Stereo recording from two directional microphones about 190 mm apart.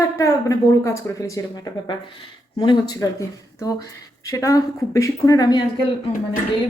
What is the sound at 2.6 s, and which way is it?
Speech, 20° left (ahead or behind).